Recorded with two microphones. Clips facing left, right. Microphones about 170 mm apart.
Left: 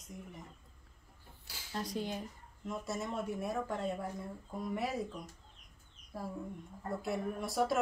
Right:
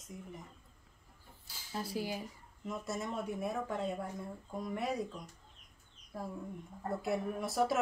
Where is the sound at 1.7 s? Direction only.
5° right (ahead or behind).